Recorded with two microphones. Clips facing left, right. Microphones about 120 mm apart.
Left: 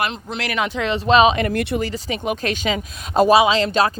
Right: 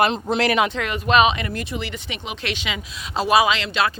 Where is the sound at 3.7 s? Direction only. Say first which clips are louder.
Left 4 dB; 40° left (ahead or behind).